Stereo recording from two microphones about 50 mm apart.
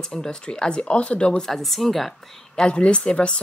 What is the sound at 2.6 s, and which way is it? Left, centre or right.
Speech, left.